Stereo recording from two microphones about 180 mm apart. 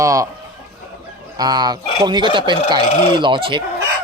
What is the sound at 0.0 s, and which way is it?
Speech, 15° right (ahead or behind).